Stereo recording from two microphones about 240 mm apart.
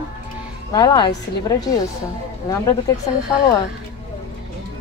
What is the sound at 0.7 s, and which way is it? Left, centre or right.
Speech, centre.